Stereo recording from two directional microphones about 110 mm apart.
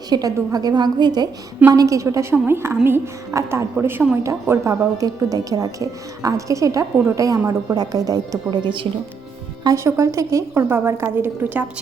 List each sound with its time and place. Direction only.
0.1 s a woman's voice: 35° right (ahead or behind)
9.7 s speech: 25° right (ahead or behind)